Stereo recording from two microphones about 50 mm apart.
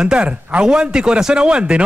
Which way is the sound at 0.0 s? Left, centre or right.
Centre.